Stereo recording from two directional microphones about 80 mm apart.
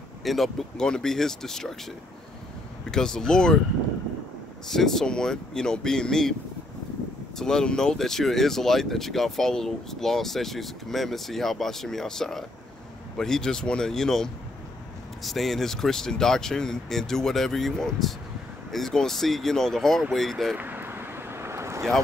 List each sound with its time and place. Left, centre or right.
0.2 s speech: centre
2.9 s speech: centre
4.6 s speech: centre
7.3 s speech: centre
20.5 s vehicle: right